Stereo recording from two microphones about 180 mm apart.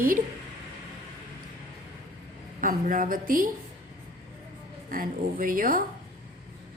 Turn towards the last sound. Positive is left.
turn(degrees=-50)  # may be behind; listen again after turning